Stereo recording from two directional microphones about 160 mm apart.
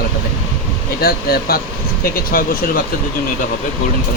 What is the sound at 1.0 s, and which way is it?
Speech, 70° left (ahead or behind).